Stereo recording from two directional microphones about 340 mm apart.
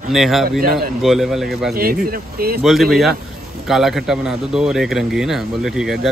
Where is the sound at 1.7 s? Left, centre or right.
Right.